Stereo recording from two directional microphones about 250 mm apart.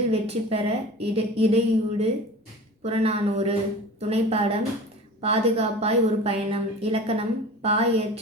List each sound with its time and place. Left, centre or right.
0.1 s a woman's voice: right